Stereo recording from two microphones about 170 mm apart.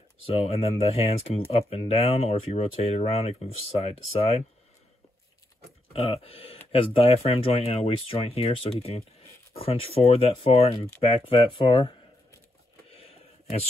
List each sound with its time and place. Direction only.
0.3 s speech: 35° left (ahead or behind)
5.9 s speech: 35° left (ahead or behind)